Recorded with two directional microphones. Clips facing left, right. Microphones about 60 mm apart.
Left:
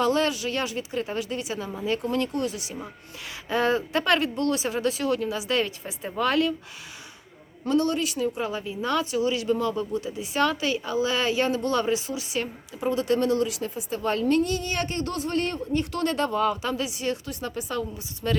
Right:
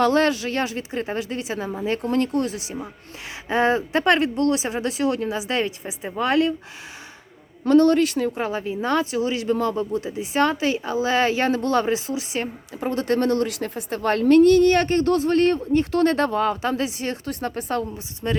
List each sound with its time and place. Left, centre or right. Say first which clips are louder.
0.0 s speech: right 5 dB; right
7.7 s speech: right 8 dB; right
8.4 s speech: right 4 dB; right
18.2 s speech: right 1 dB; centre